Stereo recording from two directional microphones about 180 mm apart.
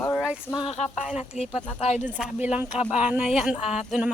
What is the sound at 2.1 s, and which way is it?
A woman's voice, 5° right (ahead or behind).